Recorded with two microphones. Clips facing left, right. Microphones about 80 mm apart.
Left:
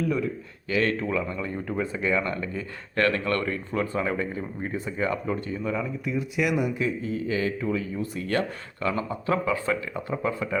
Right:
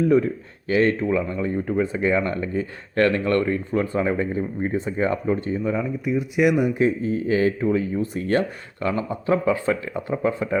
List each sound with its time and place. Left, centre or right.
0.0 s speech: right
0.8 s speech: right
6.7 s speech: right